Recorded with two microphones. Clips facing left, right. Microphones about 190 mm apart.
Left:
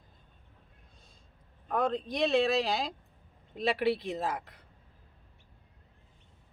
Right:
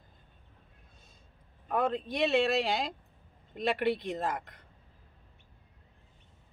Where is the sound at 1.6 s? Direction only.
5° right (ahead or behind).